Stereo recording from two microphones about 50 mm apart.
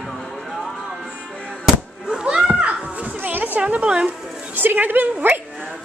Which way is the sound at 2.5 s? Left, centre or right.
Right.